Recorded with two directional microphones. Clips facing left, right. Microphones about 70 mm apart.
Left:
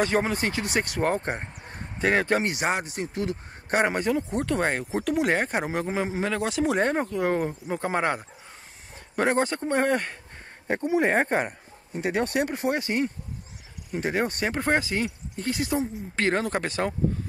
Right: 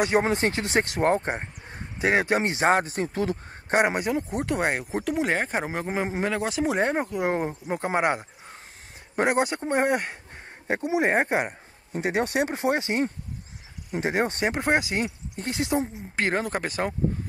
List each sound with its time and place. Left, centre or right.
0.2 s speech: right
2.7 s a sound: right
3.7 s speech: centre
11.9 s speech: right
16.4 s speech: centre